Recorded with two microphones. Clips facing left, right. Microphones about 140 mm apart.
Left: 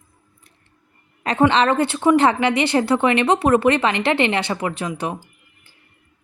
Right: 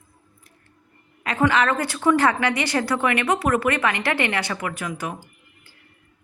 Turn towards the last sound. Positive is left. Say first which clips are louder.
# left 4 dB
turn(degrees=25)  # may be behind; listen again after turning